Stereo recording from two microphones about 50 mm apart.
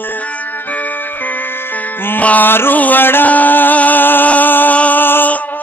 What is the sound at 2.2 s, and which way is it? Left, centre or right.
Music, left.